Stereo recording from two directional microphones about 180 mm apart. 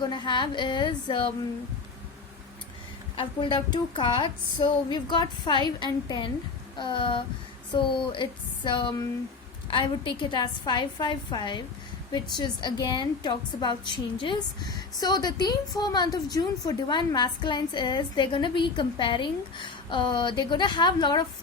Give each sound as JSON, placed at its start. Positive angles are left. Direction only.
{"t": 0.0, "sound": "a woman's voice", "side_deg": 25}
{"t": 3.2, "sound": "a woman's voice", "side_deg": 25}